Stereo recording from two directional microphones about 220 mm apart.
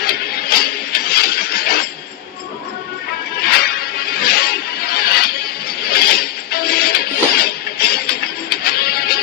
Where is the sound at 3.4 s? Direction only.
45° left (ahead or behind).